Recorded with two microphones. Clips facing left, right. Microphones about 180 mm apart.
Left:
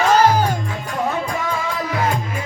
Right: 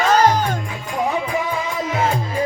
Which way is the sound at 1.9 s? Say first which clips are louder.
Right 3 dB; 25° right (ahead or behind).